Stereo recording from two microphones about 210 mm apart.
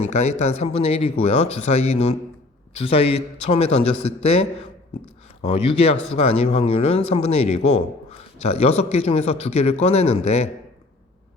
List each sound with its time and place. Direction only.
0.0 s speech: 35° left (ahead or behind)
5.4 s speech: 30° left (ahead or behind)